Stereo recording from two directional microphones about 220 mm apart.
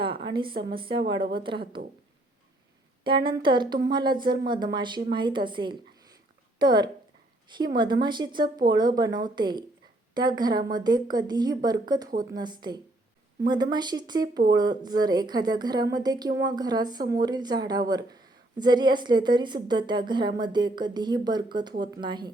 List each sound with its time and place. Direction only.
0.0 s speech: 20° right (ahead or behind)
3.0 s speech: 20° right (ahead or behind)
12.0 s speech: 40° right (ahead or behind)
12.4 s speech: 20° right (ahead or behind)